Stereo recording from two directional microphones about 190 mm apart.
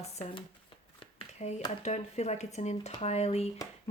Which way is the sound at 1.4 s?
35° left (ahead or behind).